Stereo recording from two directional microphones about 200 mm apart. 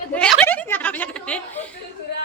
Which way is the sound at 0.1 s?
5° left (ahead or behind).